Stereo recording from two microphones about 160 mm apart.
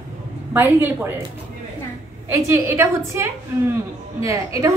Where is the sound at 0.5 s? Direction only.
15° right (ahead or behind).